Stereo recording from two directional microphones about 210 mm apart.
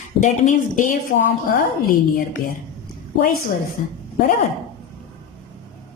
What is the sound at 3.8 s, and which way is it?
Speech, 40° left (ahead or behind).